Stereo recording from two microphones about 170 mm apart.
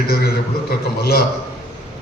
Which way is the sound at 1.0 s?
65° left (ahead or behind).